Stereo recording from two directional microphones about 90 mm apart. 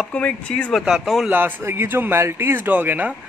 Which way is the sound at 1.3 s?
25° right (ahead or behind).